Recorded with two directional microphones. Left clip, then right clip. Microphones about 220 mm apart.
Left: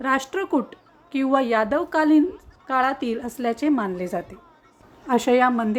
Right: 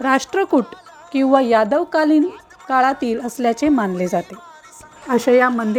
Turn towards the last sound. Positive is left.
turn(degrees=-15)  # may be behind; listen again after turning